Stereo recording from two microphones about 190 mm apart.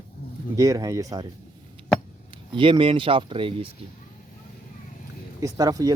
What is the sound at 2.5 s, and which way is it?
Speech, 25° right (ahead or behind).